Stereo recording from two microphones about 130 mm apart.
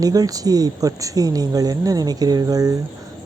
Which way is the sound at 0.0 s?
30° right (ahead or behind).